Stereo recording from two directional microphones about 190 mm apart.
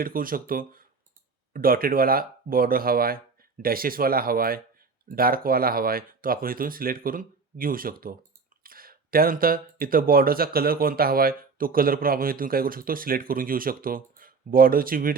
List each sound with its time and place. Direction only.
0.0 s speech: 50° right (ahead or behind)